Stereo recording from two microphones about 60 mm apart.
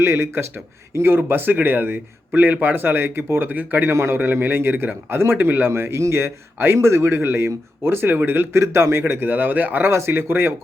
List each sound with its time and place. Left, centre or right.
0.0 s a man's voice: right
3.9 s a man's voice: right
8.6 s speech: right
9.9 s speech: right